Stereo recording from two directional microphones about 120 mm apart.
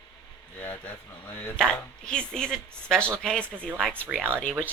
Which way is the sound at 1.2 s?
15° left (ahead or behind).